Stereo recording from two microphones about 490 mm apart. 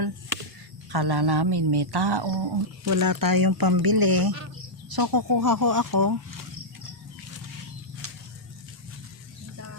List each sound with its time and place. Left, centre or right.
0.9 s speech: right
2.8 s speech: right
8.0 s a sound: right